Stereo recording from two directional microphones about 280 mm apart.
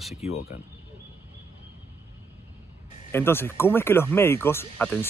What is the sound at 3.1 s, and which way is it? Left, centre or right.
Speech, centre.